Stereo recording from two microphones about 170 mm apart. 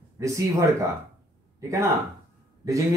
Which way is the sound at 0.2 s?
20° right (ahead or behind).